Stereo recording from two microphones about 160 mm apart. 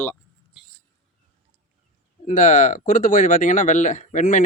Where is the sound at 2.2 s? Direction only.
50° left (ahead or behind).